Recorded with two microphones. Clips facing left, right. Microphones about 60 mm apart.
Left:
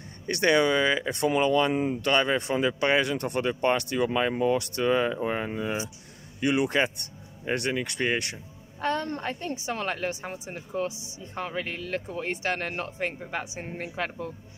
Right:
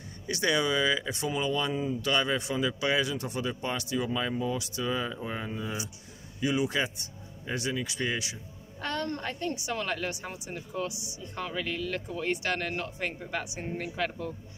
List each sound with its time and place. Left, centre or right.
0.3 s speech: left
8.8 s a woman's voice: left